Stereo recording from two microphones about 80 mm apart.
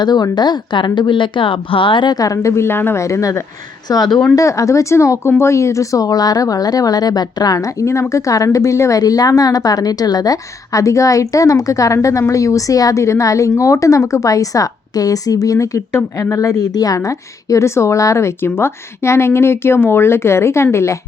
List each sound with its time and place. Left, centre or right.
0.0 s a woman's voice: left
2.1 s a woman's voice: left
3.8 s speech: left
4.4 s a woman's voice: left